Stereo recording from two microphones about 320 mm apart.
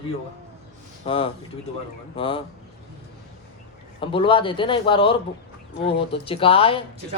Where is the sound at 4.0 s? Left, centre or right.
Centre.